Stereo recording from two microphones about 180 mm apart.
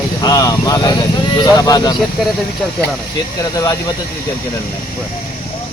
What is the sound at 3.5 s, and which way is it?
Speech, 20° left (ahead or behind).